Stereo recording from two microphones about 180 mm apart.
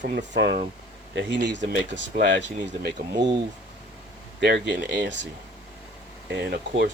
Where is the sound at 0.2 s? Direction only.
60° right (ahead or behind).